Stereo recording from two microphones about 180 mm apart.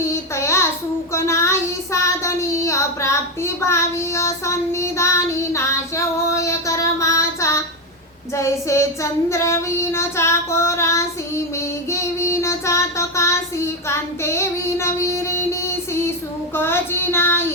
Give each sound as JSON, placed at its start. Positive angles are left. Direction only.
{"t": 0.1, "sound": "child singing", "side_deg": 15}
{"t": 5.5, "sound": "female singing", "side_deg": 15}
{"t": 8.4, "sound": "child singing", "side_deg": 15}